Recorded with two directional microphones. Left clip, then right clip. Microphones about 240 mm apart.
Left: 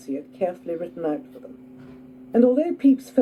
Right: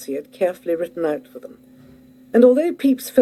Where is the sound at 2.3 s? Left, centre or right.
Right.